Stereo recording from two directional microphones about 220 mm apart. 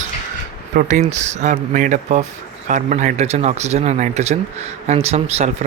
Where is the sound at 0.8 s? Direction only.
35° right (ahead or behind).